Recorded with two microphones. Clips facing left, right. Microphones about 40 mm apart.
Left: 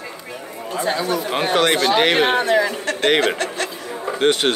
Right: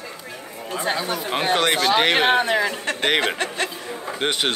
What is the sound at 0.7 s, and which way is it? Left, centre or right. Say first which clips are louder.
Speech: left 3 dB; centre.